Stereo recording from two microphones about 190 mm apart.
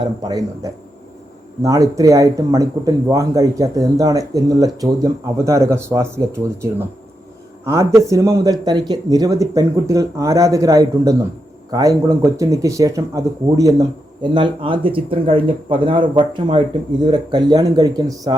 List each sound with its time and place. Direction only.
0.2 s speech: 20° right (ahead or behind)